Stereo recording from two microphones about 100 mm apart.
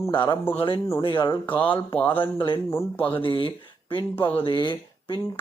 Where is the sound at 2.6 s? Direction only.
25° left (ahead or behind).